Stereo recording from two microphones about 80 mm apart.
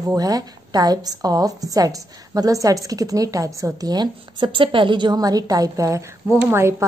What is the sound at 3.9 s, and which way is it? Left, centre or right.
Speech, right.